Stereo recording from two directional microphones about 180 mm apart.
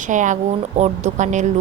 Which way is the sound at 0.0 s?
45° right (ahead or behind).